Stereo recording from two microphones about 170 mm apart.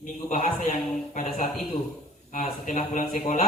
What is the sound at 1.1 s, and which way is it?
Speech, 45° left (ahead or behind).